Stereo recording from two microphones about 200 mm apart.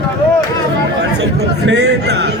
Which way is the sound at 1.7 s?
55° right (ahead or behind).